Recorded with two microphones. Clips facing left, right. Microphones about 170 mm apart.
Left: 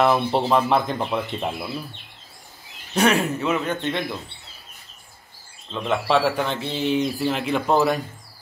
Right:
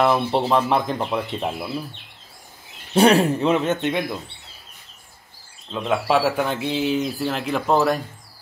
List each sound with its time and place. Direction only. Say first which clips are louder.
0.0 s speech: even; centre (ahead or behind)
2.9 s speech: right 4 dB; 30° right (ahead or behind)
5.7 s speech: right 1 dB; 5° right (ahead or behind)